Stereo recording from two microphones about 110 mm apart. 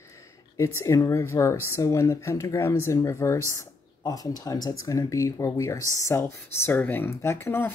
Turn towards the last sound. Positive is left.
turn(degrees=20)  # may be behind; listen again after turning